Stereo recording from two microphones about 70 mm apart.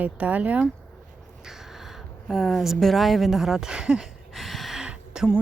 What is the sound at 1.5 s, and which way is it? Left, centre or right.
Speech, centre.